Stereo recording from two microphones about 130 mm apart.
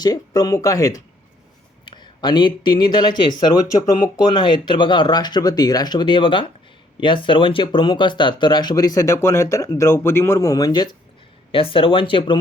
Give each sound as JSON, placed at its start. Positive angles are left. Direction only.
{"t": 0.0, "sound": "speech", "side_deg": 30}
{"t": 11.5, "sound": "speech", "side_deg": 45}